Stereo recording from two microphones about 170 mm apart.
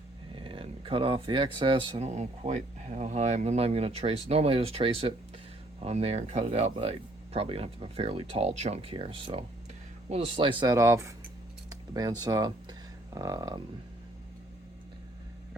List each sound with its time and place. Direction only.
0.3 s speech: 30° right (ahead or behind)
11.7 s a sound: 20° right (ahead or behind)
12.2 s speech: 25° right (ahead or behind)